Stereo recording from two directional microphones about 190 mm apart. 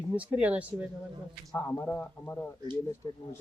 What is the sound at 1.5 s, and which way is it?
A man's voice, 10° left (ahead or behind).